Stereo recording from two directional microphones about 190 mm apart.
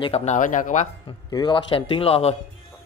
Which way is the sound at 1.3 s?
25° left (ahead or behind).